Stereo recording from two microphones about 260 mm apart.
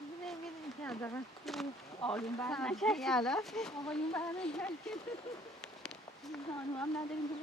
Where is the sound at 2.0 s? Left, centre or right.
Centre.